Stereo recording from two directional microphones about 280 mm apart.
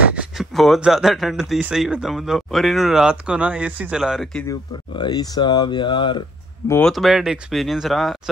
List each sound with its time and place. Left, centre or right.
0.1 s speech: centre
4.9 s speech: centre
6.7 s speech: centre